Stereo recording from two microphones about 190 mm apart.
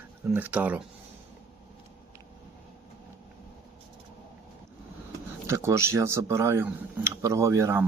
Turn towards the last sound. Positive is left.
turn(degrees=-15)  # may be behind; listen again after turning